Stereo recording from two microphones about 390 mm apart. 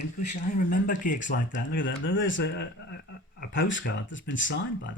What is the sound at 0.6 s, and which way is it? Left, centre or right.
Speech, left.